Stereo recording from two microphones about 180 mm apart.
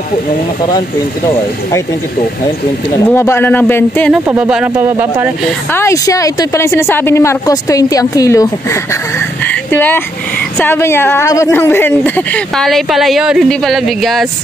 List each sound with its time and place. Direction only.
0.7 s speech: 20° left (ahead or behind)
3.1 s a woman's voice: 15° left (ahead or behind)
4.3 s speech: 5° right (ahead or behind)
5.7 s a woman's voice: 15° left (ahead or behind)